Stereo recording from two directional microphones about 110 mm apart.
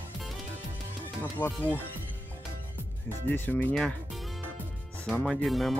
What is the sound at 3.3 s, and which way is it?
Speech, 15° left (ahead or behind).